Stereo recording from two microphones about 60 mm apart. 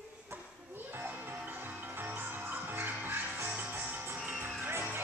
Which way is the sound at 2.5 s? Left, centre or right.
Right.